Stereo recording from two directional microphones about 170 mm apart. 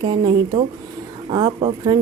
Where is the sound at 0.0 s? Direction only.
25° right (ahead or behind).